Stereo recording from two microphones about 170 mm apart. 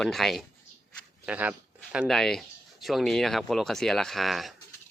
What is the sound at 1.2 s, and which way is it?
Speech, 10° right (ahead or behind).